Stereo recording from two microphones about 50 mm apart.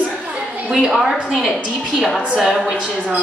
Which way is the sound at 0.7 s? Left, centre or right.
Centre.